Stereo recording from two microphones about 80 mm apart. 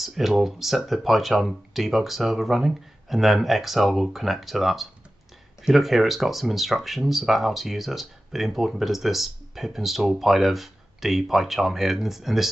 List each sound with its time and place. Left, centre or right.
0.0 s speech: centre